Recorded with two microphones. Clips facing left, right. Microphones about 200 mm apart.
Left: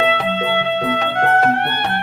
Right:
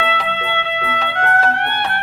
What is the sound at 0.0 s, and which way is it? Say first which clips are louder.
Music: left 4 dB; 45° left (ahead or behind).